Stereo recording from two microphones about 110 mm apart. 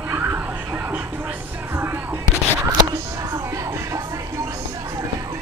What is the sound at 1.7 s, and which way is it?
Music, 20° right (ahead or behind).